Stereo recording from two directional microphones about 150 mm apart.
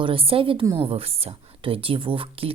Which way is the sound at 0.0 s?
35° right (ahead or behind).